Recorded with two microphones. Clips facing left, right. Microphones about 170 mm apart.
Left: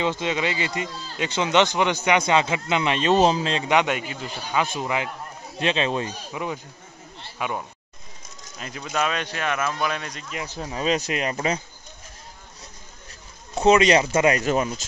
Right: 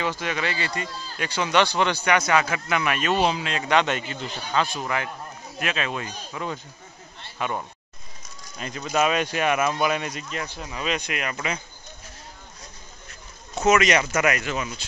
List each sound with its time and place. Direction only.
0.0 s speech: 20° left (ahead or behind)
3.2 s speech: 35° left (ahead or behind)
3.6 s a man's voice: 15° left (ahead or behind)
5.6 s speech: 30° left (ahead or behind)
6.3 s a man's voice: 15° left (ahead or behind); by 10.2 s 10° right (ahead or behind)
10.5 s speech: 35° left (ahead or behind)
13.6 s speech: 30° left (ahead or behind)
14.5 s speech: 45° left (ahead or behind)